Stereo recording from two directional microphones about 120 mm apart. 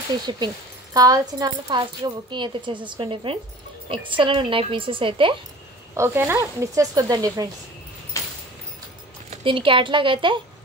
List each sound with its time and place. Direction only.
0.3 s a woman's voice: 40° right (ahead or behind)
5.9 s speech: 20° right (ahead or behind)
8.2 s a sound: 25° left (ahead or behind)
9.4 s a woman's voice: 45° right (ahead or behind)